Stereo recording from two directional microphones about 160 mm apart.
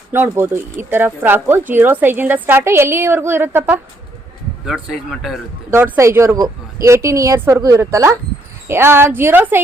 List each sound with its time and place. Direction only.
0.1 s speech: 15° right (ahead or behind)
4.6 s speech: 5° right (ahead or behind)
5.7 s a woman's voice: 15° right (ahead or behind)